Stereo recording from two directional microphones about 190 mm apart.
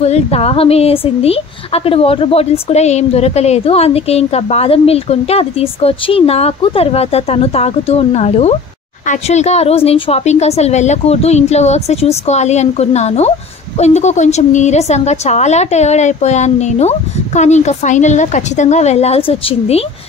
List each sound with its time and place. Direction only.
0.0 s a woman's voice: 35° left (ahead or behind)